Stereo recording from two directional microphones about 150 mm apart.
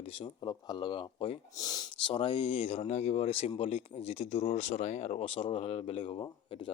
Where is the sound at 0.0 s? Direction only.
35° left (ahead or behind).